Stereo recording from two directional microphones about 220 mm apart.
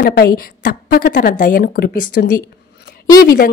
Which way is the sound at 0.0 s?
45° left (ahead or behind).